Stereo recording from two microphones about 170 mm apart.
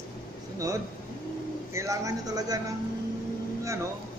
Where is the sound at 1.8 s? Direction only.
20° right (ahead or behind).